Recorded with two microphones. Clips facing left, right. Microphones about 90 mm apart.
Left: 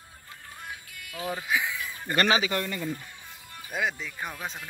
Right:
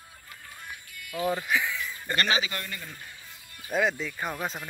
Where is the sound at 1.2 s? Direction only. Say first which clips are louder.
Right 2 dB; 5° left (ahead or behind).